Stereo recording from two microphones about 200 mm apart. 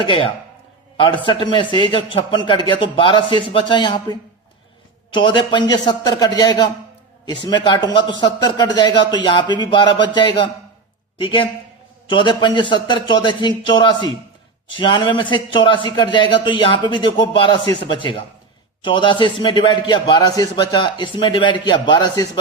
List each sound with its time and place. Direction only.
0.0 s a man's voice: 25° left (ahead or behind)